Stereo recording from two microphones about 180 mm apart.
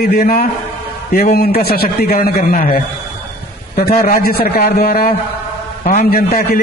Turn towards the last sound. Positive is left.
turn(degrees=50)  # may be behind; listen again after turning